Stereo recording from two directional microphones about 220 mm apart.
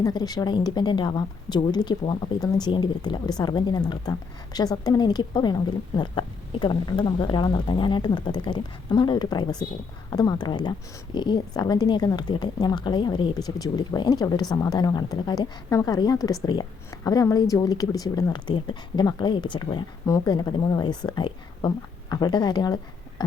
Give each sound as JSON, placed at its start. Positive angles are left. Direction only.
{"t": 0.0, "sound": "a woman's voice", "side_deg": 20}